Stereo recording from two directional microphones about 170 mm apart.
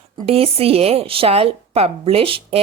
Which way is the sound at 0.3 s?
35° right (ahead or behind).